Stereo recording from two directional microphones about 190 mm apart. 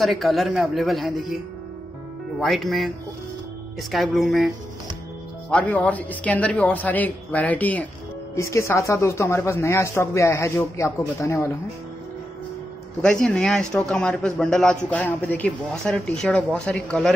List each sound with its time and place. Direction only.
0.0 s speech: centre (ahead or behind)
3.9 s speech: centre (ahead or behind)
5.5 s speech: 5° left (ahead or behind)
13.0 s speech: 5° left (ahead or behind)